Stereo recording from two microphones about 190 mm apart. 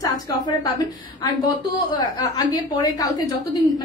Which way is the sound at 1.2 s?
25° left (ahead or behind).